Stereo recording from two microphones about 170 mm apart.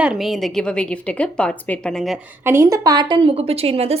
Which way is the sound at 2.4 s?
15° right (ahead or behind).